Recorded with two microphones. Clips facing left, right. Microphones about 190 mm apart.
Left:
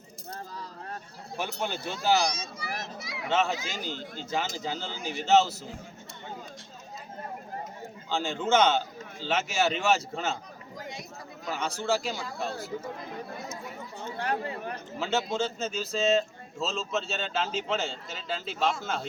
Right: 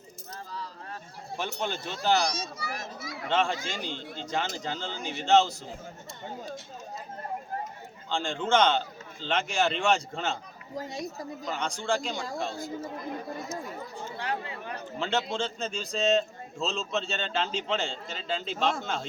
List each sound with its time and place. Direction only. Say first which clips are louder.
1.4 s a man's voice: even; 10° left (ahead or behind)
2.6 s children playing: even; 45° right (ahead or behind)
3.2 s a man's voice: even; 5° left (ahead or behind)
3.8 s speech: even; 40° left (ahead or behind)
4.2 s a man's voice: even; 5° left (ahead or behind)
8.1 s a man's voice: left 1 dB; 5° left (ahead or behind)
10.8 s speech: right 5 dB; 40° right (ahead or behind)
11.4 s a man's voice: left 1 dB; 5° left (ahead or behind)
14.0 s chatter: left 4 dB; 45° left (ahead or behind)
14.9 s a man's voice: left 1 dB; 5° left (ahead or behind)